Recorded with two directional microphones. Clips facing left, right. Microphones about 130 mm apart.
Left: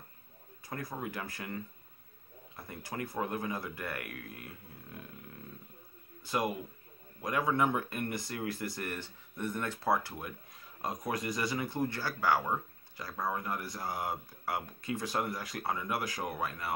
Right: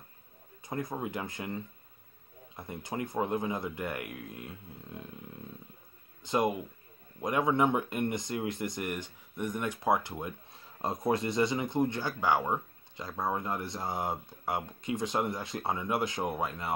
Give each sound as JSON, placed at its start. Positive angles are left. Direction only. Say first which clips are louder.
{"t": 0.7, "sound": "speech", "louder": "right 4 dB", "side_deg": -20}
{"t": 6.2, "sound": "speech", "louder": "right 4 dB", "side_deg": -20}